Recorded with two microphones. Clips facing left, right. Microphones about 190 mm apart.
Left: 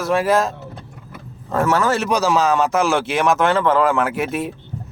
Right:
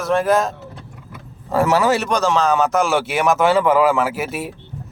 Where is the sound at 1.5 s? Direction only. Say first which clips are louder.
Right 2 dB; 15° right (ahead or behind).